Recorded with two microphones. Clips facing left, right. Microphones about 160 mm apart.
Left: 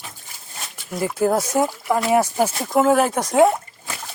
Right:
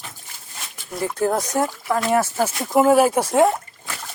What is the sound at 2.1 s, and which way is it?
Speech, 15° left (ahead or behind).